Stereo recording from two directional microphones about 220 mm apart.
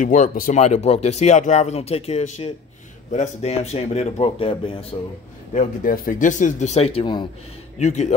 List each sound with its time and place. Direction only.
0.0 s speech: 35° left (ahead or behind)
5.5 s speech: 35° left (ahead or behind)